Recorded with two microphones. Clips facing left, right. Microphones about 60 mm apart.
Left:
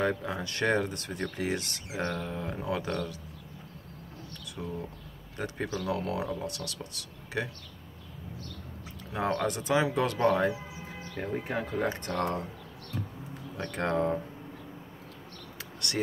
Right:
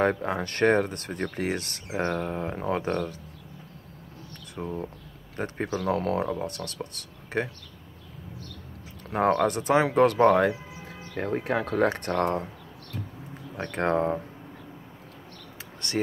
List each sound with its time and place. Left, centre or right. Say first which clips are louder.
0.0 s speech: right 5 dB; right
4.5 s speech: right 5 dB; right
9.1 s speech: right 7 dB; right
11.4 s speech: right 8 dB; right
12.2 s speech: right 5 dB; right
13.7 s speech: right 4 dB; right